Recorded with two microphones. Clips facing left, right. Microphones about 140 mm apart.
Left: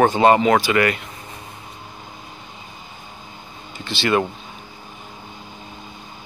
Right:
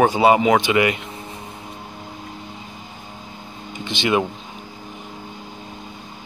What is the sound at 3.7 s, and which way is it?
Speech, 15° right (ahead or behind).